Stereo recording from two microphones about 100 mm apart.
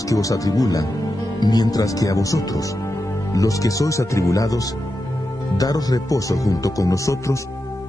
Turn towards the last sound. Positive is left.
turn(degrees=30)  # may be behind; listen again after turning